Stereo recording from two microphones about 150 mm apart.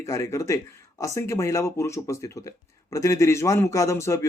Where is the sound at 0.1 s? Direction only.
20° left (ahead or behind).